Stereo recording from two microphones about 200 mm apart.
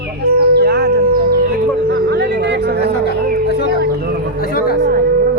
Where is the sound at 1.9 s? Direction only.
55° right (ahead or behind).